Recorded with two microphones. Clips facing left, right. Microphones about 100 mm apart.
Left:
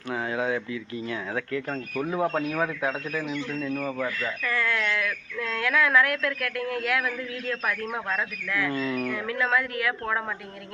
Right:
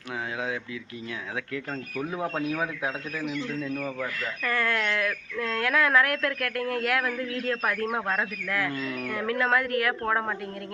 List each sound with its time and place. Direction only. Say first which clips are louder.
0.1 s speech: left 4 dB; centre (ahead or behind)
4.4 s speech: right 1 dB; 50° right (ahead or behind)
8.7 s speech: left 4 dB; centre (ahead or behind)
9.1 s speech: right 5 dB; 50° right (ahead or behind)
10.1 s a woman's voice: right 2 dB; 35° right (ahead or behind)